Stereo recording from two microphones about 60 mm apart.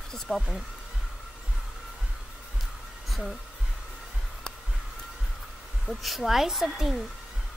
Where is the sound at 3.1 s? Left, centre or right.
Centre.